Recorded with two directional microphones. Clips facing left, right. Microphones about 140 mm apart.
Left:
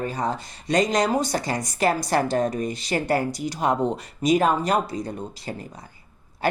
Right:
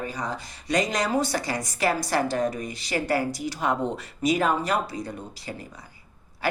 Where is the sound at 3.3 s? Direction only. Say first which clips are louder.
Left 2 dB; 20° left (ahead or behind).